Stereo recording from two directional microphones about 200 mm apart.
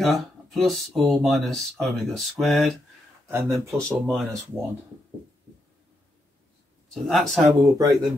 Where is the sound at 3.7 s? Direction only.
Centre (ahead or behind).